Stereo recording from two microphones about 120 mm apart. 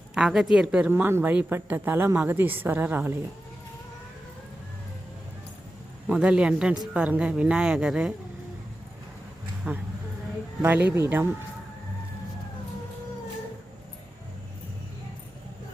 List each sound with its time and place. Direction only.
0.1 s speech: 5° right (ahead or behind)
6.1 s speech: 10° right (ahead or behind)
9.7 s speech: 15° right (ahead or behind)